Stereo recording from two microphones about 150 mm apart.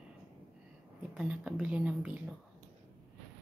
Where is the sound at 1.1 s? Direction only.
5° right (ahead or behind).